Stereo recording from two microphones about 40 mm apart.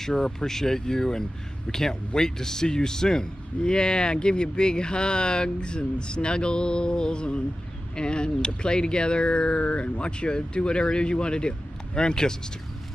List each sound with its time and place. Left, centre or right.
0.0 s a man's voice: centre